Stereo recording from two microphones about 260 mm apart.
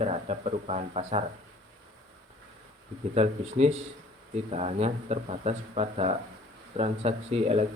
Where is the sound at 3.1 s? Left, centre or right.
Right.